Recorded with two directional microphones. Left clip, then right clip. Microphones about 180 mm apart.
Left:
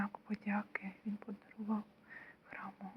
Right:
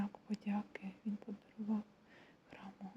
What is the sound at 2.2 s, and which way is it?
Whispering, 25° right (ahead or behind).